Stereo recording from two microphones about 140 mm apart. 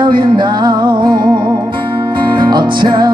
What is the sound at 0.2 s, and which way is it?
Music, 30° right (ahead or behind).